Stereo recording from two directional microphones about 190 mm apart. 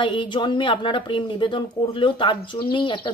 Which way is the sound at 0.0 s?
25° left (ahead or behind).